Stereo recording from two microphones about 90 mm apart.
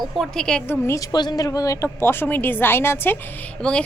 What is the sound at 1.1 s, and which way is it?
A woman's voice, 50° left (ahead or behind).